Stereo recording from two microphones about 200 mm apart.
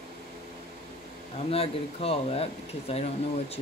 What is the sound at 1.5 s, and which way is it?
Speech, 30° left (ahead or behind).